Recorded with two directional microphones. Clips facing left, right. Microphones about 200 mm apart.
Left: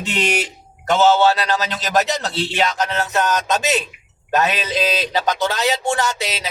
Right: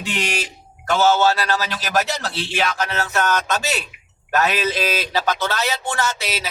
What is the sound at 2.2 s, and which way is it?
Speech, 20° left (ahead or behind).